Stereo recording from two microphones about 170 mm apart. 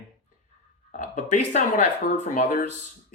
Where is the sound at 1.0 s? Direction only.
45° left (ahead or behind).